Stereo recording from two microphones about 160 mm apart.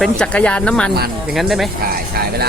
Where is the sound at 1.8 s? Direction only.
70° right (ahead or behind).